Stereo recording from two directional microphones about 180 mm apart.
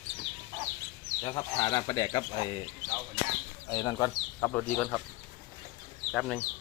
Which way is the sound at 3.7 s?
20° left (ahead or behind).